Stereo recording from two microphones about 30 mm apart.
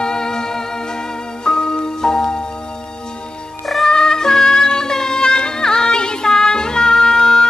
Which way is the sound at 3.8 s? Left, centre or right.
Left.